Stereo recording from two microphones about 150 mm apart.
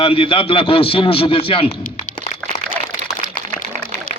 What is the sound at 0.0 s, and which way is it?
Speech, 35° left (ahead or behind).